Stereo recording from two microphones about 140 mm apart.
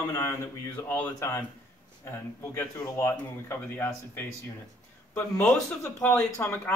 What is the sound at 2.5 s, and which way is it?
Speech, 20° left (ahead or behind).